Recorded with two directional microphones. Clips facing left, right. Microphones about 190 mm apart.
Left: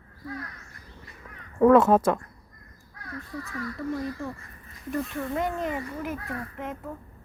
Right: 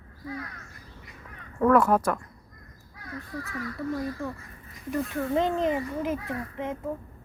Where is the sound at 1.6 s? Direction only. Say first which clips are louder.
Left 4 dB; 25° left (ahead or behind).